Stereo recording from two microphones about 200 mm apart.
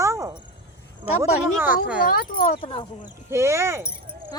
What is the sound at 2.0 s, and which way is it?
Speech, 45° left (ahead or behind).